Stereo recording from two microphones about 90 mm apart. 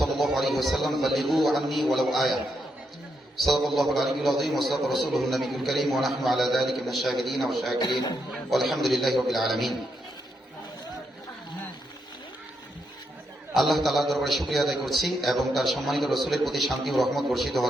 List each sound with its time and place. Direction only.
0.0 s a man's voice: centre (ahead or behind)
7.8 s a man's voice: 55° left (ahead or behind)
8.4 s a man's voice: centre (ahead or behind)
13.5 s a man's voice: centre (ahead or behind)